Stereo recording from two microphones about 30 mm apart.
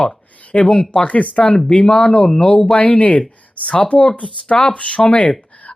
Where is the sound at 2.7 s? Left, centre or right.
Left.